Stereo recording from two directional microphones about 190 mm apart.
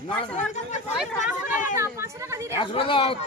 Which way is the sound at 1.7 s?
15° right (ahead or behind).